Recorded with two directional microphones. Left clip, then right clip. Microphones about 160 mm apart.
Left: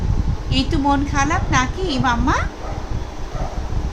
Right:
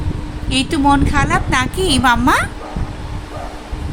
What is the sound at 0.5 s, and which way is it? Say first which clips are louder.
A woman's voice: right 5 dB; 40° right (ahead or behind).